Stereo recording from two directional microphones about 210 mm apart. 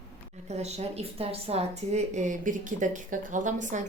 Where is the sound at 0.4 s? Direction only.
30° right (ahead or behind).